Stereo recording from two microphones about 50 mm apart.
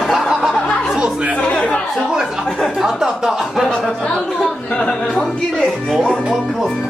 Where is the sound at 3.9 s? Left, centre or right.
Centre.